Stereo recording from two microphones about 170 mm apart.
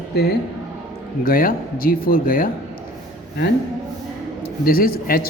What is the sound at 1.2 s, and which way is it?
A man's voice, 60° left (ahead or behind).